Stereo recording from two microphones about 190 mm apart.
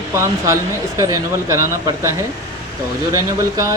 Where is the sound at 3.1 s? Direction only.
15° right (ahead or behind).